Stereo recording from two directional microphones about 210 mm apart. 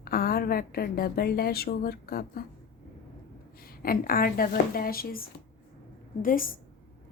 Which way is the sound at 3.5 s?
45° left (ahead or behind).